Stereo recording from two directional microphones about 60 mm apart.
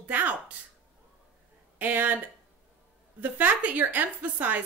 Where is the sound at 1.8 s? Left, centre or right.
Right.